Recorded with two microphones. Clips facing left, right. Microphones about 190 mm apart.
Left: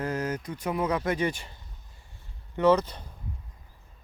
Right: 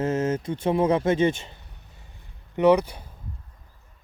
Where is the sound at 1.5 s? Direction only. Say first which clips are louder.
Right 2 dB; 70° right (ahead or behind).